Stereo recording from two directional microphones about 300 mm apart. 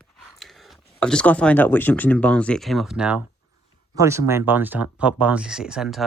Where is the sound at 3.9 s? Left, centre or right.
Centre.